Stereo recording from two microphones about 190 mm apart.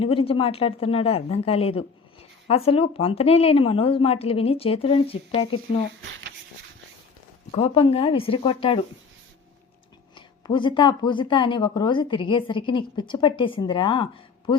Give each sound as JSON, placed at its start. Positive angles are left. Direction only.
{"t": 0.0, "sound": "speech", "side_deg": 30}
{"t": 7.5, "sound": "speech", "side_deg": 30}
{"t": 10.2, "sound": "speech", "side_deg": 25}